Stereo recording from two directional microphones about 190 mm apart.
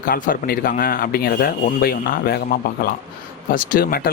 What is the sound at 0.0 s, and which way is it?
Speech, 50° left (ahead or behind).